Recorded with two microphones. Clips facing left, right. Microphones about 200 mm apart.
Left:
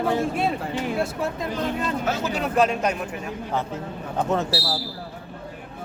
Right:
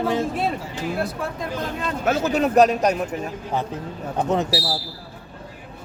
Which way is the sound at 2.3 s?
40° right (ahead or behind).